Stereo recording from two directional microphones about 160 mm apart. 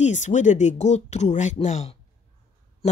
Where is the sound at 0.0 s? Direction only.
50° left (ahead or behind).